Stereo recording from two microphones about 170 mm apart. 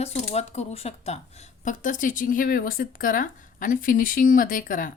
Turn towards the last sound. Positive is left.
turn(degrees=50)  # may be behind; listen again after turning